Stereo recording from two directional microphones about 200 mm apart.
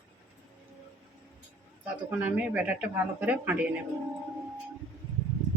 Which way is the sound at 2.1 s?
10° right (ahead or behind).